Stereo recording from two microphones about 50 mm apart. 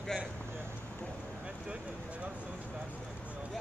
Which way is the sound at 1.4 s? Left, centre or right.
Right.